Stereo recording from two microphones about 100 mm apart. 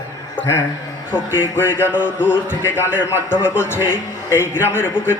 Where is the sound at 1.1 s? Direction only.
20° left (ahead or behind).